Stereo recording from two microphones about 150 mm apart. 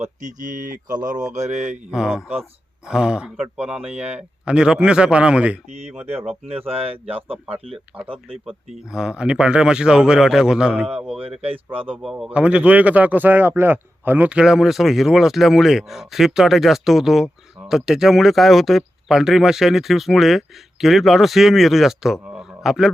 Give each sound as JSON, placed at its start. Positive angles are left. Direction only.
{"t": 0.0, "sound": "speech", "side_deg": -55}
{"t": 1.9, "sound": "speech", "side_deg": -5}
{"t": 6.7, "sound": "speech", "side_deg": -40}
{"t": 7.9, "sound": "speech", "side_deg": -5}
{"t": 11.4, "sound": "speech", "side_deg": -40}
{"t": 12.1, "sound": "speech", "side_deg": -10}